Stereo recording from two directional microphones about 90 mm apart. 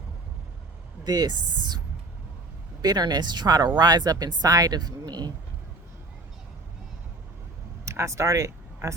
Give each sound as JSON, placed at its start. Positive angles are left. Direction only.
{"t": 1.0, "sound": "speech", "side_deg": -50}
{"t": 2.8, "sound": "speech", "side_deg": -50}
{"t": 7.9, "sound": "speech", "side_deg": -30}